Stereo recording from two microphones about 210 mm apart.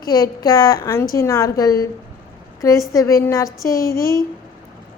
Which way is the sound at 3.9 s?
45° left (ahead or behind).